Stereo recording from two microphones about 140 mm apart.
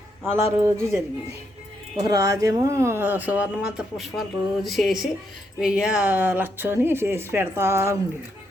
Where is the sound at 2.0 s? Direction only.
25° right (ahead or behind).